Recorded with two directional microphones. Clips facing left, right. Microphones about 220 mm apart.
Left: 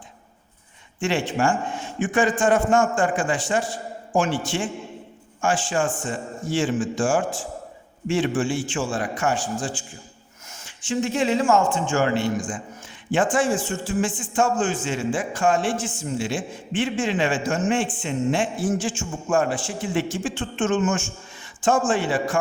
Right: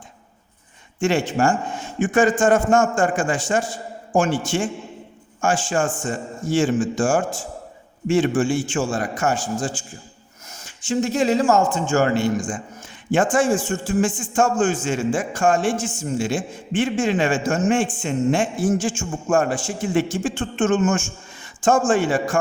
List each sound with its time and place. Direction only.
0.9 s a man's voice: 45° right (ahead or behind)